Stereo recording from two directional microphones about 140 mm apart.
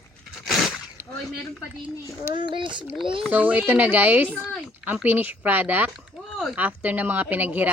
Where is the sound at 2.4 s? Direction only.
35° right (ahead or behind).